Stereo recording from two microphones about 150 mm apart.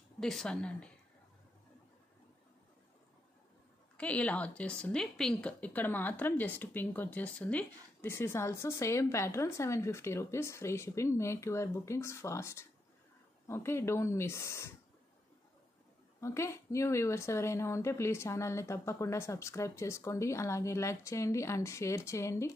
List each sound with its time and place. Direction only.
0.2 s speech: 5° left (ahead or behind)
3.9 s a woman's voice: 10° left (ahead or behind)
16.2 s a woman's voice: 20° left (ahead or behind)